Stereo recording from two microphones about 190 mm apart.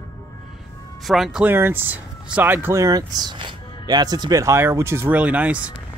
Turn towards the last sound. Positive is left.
turn(degrees=-5)  # may be behind; listen again after turning